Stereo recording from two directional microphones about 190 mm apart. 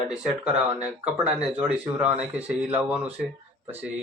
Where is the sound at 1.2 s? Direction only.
5° right (ahead or behind).